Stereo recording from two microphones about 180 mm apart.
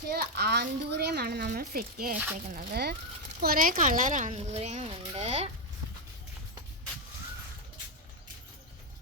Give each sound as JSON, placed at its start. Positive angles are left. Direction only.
{"t": 0.1, "sound": "a child's voice", "side_deg": -65}